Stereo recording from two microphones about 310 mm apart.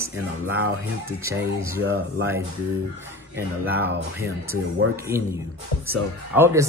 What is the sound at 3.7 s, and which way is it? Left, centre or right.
Speech, right.